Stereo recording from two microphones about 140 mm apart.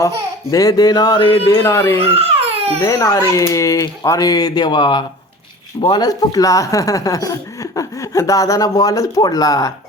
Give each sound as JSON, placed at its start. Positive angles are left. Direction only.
{"t": 0.5, "sound": "speech", "side_deg": 25}
{"t": 1.6, "sound": "speech", "side_deg": 20}
{"t": 2.0, "sound": "crying", "side_deg": -45}
{"t": 2.8, "sound": "speech", "side_deg": 20}